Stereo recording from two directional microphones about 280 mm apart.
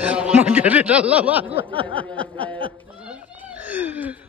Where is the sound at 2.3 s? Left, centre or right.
Centre.